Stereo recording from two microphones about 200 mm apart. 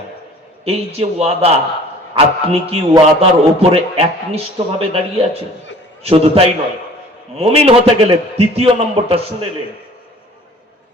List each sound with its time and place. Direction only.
0.6 s a man's voice: 30° right (ahead or behind)